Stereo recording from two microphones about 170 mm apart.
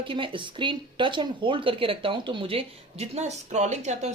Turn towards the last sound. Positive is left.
turn(degrees=-45)  # may be behind; listen again after turning